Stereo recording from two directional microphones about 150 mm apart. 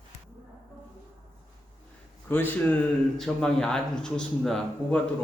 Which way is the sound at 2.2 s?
10° left (ahead or behind).